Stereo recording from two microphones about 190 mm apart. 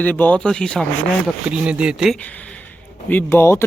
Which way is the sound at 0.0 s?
10° left (ahead or behind).